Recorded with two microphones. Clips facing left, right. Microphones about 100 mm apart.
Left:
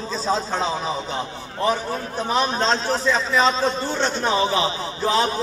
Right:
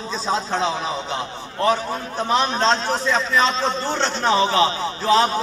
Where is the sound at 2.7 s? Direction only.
5° left (ahead or behind).